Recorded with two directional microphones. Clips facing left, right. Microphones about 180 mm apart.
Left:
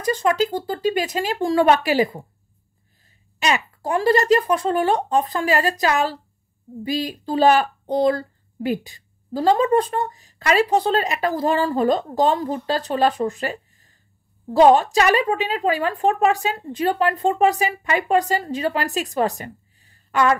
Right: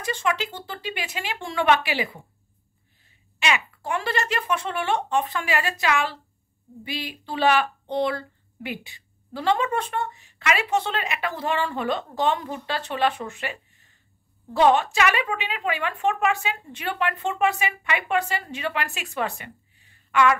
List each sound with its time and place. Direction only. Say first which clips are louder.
0.0 s speech: left 7 dB; 40° left (ahead or behind)